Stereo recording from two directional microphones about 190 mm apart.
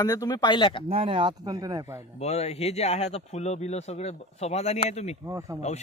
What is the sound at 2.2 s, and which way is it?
Speech, 35° left (ahead or behind).